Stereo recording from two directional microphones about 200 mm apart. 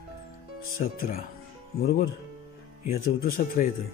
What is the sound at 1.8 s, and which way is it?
Speech, 50° left (ahead or behind).